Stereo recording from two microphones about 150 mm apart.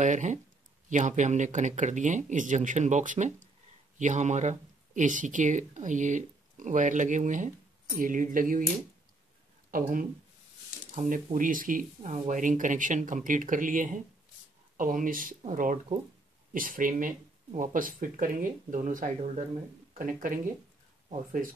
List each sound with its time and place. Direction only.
0.0 s speech: 55° right (ahead or behind)
9.7 s speech: 65° right (ahead or behind)